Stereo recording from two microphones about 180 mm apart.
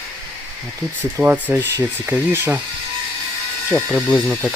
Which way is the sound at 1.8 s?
15° right (ahead or behind).